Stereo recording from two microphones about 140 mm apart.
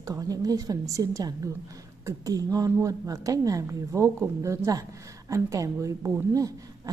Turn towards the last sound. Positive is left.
turn(degrees=-25)  # may be behind; listen again after turning